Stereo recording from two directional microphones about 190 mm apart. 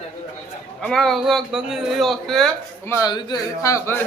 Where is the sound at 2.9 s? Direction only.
15° left (ahead or behind).